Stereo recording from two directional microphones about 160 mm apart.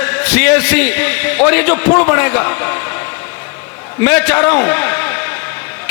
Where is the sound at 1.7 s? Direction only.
20° left (ahead or behind).